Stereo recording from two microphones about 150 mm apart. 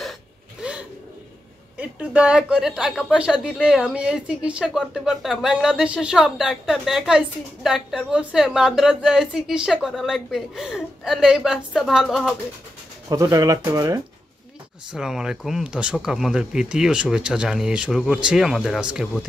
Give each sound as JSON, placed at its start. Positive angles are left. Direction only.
{"t": 0.6, "sound": "a sound", "side_deg": -5}
{"t": 1.8, "sound": "speech", "side_deg": -10}
{"t": 13.1, "sound": "speech", "side_deg": -25}
{"t": 14.9, "sound": "speech", "side_deg": -5}